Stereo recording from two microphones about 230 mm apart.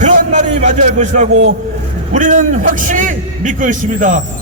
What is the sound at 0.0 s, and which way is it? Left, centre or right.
Music, right.